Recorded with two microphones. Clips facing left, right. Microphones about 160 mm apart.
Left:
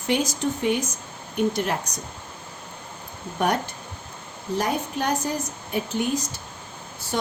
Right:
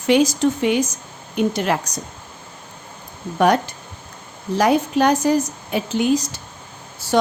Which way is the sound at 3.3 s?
90° right.